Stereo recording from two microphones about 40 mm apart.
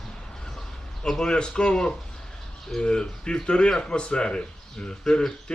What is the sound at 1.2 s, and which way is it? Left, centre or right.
Speech, left.